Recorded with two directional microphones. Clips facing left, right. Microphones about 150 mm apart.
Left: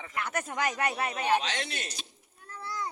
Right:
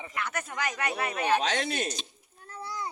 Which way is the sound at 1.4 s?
50° right (ahead or behind).